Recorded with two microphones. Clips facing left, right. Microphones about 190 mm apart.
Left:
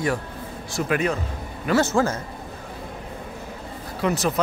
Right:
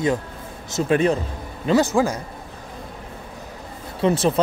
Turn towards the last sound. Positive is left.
turn(degrees=-30)  # may be behind; listen again after turning